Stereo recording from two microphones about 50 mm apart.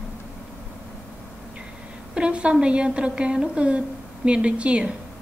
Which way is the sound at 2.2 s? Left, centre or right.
Right.